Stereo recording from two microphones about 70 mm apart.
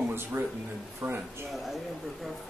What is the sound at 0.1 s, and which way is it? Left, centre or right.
Speech, right.